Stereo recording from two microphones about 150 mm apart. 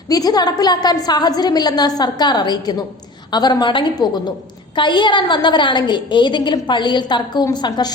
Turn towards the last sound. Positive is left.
turn(degrees=25)  # may be behind; listen again after turning